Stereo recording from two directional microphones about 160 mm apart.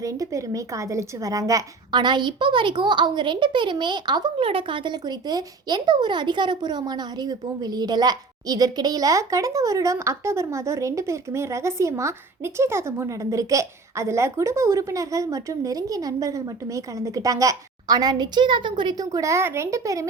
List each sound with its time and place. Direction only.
0.0 s a woman's voice: 20° right (ahead or behind)